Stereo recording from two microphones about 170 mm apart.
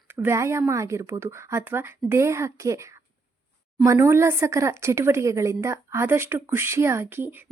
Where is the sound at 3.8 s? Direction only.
15° right (ahead or behind).